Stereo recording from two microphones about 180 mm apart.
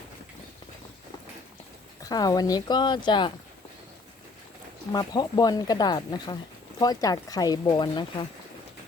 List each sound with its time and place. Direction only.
2.0 s speech: 20° left (ahead or behind)
4.9 s speech: 20° left (ahead or behind)